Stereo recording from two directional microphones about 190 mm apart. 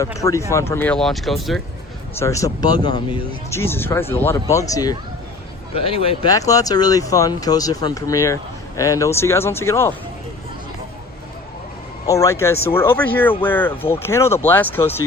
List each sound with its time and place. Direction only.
0.0 s speech: 15° left (ahead or behind); by 1.6 s centre (ahead or behind)
2.1 s speech: 15° left (ahead or behind)
5.7 s speech: 30° left (ahead or behind)
6.3 s speech: 20° left (ahead or behind)
12.0 s speech: 15° left (ahead or behind)